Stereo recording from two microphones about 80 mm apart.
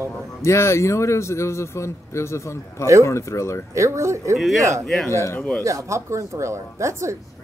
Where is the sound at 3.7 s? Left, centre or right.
Right.